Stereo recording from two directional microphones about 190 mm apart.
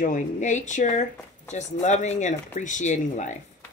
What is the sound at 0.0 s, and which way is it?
Speech, 40° left (ahead or behind).